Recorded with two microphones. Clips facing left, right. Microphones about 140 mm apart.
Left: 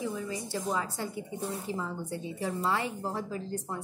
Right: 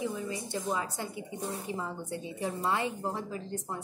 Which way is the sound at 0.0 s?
15° right (ahead or behind).